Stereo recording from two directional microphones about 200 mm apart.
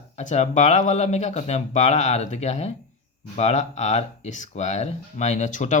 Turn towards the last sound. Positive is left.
turn(degrees=40)  # may be behind; listen again after turning